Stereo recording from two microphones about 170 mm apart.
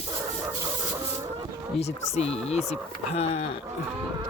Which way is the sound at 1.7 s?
40° left (ahead or behind).